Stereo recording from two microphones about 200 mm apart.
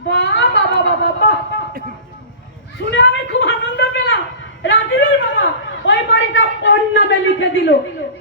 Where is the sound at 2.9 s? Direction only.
60° left (ahead or behind).